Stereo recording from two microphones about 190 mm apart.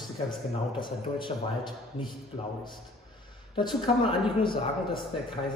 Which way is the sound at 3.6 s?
25° left (ahead or behind).